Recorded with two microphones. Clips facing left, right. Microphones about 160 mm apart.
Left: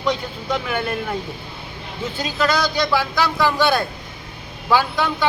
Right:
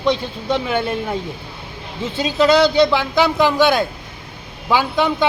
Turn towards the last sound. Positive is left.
turn(degrees=-20)  # may be behind; listen again after turning